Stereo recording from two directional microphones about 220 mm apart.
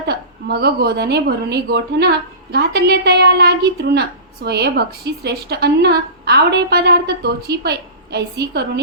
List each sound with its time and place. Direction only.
0.1 s a woman's voice: 45° right (ahead or behind)